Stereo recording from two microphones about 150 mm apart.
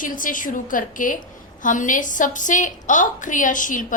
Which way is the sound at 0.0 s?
60° left (ahead or behind).